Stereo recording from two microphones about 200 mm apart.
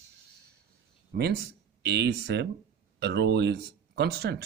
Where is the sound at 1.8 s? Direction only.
55° right (ahead or behind).